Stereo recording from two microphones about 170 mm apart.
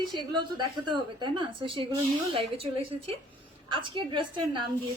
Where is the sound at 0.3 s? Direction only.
25° right (ahead or behind).